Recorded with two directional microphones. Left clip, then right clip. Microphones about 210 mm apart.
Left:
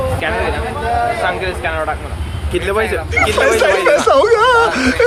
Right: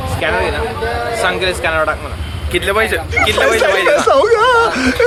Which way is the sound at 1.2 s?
60° right (ahead or behind).